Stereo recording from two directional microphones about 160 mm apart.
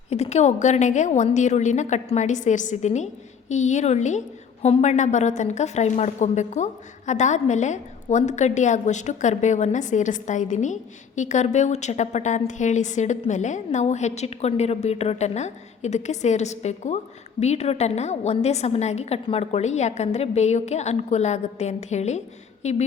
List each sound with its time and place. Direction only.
0.1 s a woman's voice: 40° left (ahead or behind)